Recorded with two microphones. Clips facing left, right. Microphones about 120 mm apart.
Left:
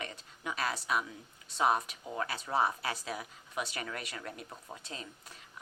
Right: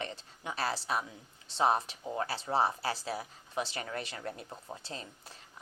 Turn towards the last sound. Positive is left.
turn(degrees=-30)  # may be behind; listen again after turning